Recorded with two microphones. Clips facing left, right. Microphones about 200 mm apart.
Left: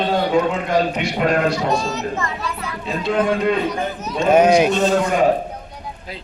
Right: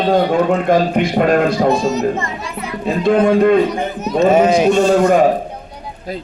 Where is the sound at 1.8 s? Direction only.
20° right (ahead or behind).